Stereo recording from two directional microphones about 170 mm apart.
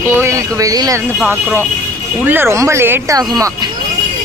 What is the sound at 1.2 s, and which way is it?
Speech, 10° right (ahead or behind).